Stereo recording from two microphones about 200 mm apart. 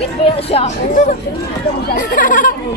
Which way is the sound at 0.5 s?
40° left (ahead or behind).